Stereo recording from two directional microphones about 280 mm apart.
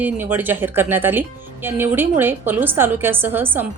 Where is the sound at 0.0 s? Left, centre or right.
Centre.